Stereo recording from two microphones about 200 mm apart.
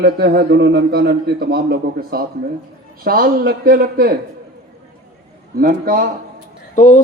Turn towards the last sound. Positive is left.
turn(degrees=40)  # may be behind; listen again after turning